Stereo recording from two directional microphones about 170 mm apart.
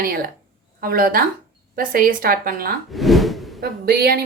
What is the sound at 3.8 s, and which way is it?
Speech, 65° right (ahead or behind).